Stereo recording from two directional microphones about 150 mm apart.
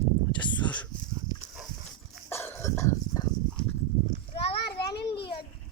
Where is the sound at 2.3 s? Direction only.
15° left (ahead or behind).